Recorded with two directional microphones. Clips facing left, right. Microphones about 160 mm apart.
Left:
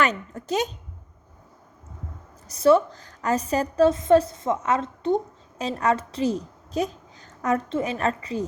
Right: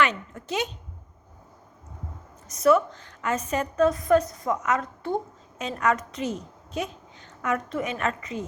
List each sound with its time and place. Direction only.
0.0 s speech: 40° left (ahead or behind)
2.5 s a woman's voice: 30° left (ahead or behind)
5.5 s a woman's voice: 35° left (ahead or behind)